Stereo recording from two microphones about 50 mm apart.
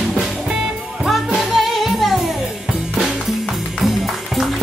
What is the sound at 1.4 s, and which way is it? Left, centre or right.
Music, centre.